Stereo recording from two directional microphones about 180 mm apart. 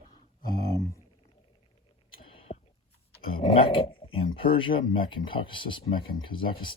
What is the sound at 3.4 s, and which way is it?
Dog, 30° left (ahead or behind).